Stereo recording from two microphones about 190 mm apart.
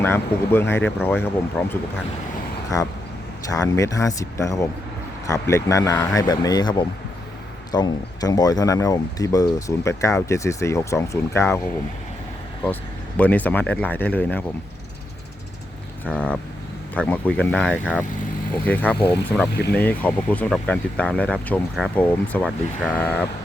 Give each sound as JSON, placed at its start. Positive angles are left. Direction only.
{"t": 0.0, "sound": "speech", "side_deg": 10}
{"t": 2.7, "sound": "speech", "side_deg": 15}
{"t": 13.1, "sound": "speech", "side_deg": 10}
{"t": 16.1, "sound": "speech", "side_deg": 5}